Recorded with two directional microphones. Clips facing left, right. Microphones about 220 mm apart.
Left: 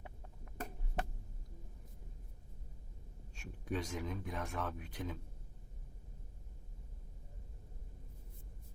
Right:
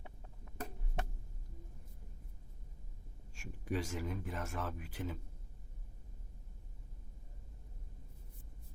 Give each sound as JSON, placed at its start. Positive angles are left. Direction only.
{"t": 3.3, "sound": "speech", "side_deg": -10}